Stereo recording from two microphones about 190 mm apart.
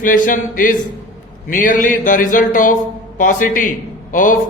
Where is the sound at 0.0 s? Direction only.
45° left (ahead or behind).